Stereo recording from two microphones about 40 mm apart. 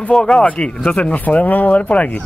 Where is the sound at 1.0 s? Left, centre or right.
Left.